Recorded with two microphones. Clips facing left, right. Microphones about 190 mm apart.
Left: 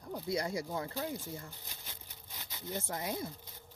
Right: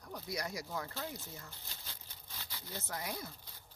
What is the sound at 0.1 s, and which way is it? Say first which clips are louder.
Speech: left 6 dB; 25° left (ahead or behind).